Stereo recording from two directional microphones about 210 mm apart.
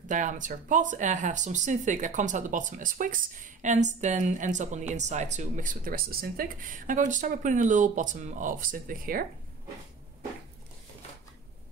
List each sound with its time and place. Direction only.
0.1 s speech: 35° right (ahead or behind)